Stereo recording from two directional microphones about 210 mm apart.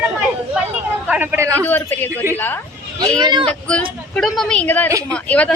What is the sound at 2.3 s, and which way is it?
Speech, 10° left (ahead or behind).